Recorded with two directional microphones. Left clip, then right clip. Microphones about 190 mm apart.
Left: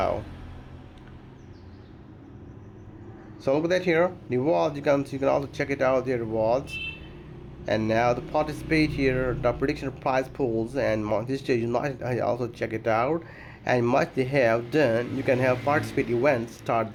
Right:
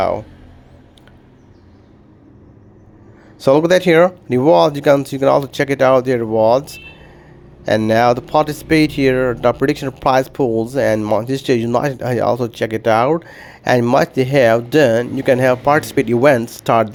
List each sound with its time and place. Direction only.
3.4 s speech: 50° right (ahead or behind)
7.9 s speech: 45° right (ahead or behind)